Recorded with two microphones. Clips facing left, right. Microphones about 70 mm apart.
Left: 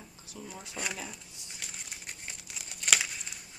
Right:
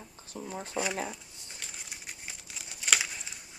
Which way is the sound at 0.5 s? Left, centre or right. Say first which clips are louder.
Right 9 dB; right.